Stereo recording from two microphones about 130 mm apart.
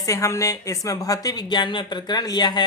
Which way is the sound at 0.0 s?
25° left (ahead or behind).